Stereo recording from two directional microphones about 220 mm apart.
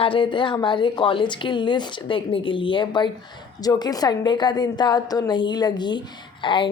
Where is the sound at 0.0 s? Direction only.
25° left (ahead or behind).